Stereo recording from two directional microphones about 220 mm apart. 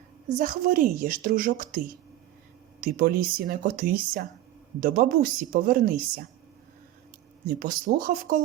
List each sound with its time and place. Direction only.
0.3 s a woman's voice: 35° right (ahead or behind)
7.4 s a woman's voice: 40° right (ahead or behind)